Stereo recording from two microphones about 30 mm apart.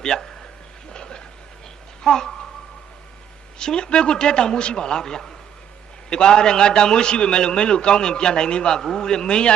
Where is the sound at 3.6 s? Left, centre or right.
Left.